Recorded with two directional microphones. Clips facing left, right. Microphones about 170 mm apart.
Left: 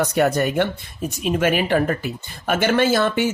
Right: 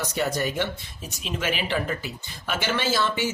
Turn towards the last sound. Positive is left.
turn(degrees=55)  # may be behind; listen again after turning